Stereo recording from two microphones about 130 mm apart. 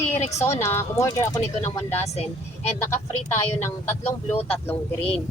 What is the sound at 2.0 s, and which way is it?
Speech, 55° left (ahead or behind).